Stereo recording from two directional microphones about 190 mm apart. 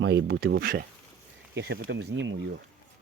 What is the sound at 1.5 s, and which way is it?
Speech, 60° right (ahead or behind).